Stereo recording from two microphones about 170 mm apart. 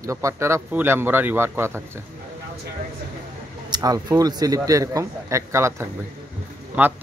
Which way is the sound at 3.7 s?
20° right (ahead or behind).